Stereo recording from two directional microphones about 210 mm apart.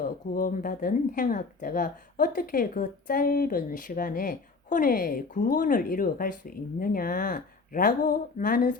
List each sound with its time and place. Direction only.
0.0 s speech: 40° left (ahead or behind)